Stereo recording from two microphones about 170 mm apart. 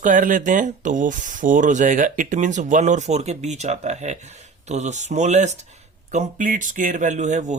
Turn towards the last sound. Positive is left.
turn(degrees=-45)  # may be behind; listen again after turning